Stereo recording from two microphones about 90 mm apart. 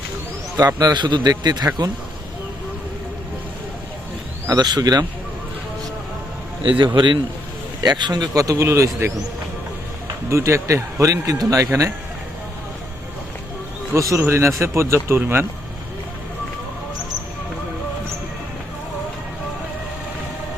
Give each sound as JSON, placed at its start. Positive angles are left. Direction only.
{"t": 0.8, "sound": "a man's voice", "side_deg": -50}
{"t": 4.4, "sound": "a man's voice", "side_deg": -50}
{"t": 6.7, "sound": "a man's voice", "side_deg": -65}
{"t": 10.2, "sound": "speech", "side_deg": -30}
{"t": 13.9, "sound": "speech", "side_deg": -35}